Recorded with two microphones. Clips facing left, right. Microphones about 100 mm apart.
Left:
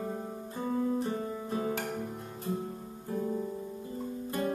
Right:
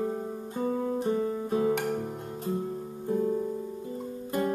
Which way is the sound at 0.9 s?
30° right (ahead or behind).